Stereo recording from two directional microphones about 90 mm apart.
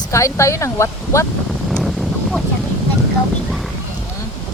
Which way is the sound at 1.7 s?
Centre (ahead or behind).